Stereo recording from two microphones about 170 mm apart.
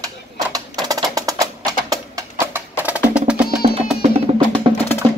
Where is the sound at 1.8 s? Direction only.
15° right (ahead or behind).